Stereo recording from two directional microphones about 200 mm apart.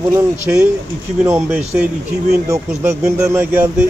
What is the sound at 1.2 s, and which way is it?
Speech, 10° right (ahead or behind).